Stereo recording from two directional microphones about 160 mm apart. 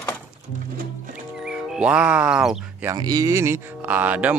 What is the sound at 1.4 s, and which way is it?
Speech, 5° right (ahead or behind).